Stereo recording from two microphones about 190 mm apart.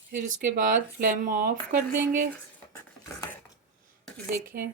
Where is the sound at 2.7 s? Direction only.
15° left (ahead or behind).